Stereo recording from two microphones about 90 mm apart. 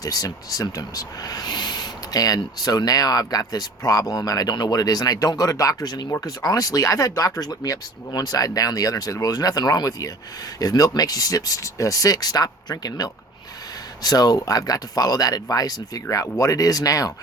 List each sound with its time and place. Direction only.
0.0 s speech: 45° left (ahead or behind)